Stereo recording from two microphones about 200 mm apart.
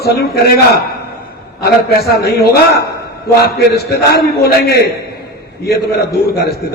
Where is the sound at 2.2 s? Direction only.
50° left (ahead or behind).